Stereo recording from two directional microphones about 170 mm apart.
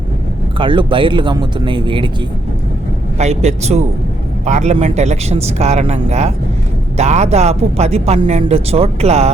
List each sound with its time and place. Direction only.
0.6 s speech: 30° right (ahead or behind)
3.2 s speech: 40° right (ahead or behind)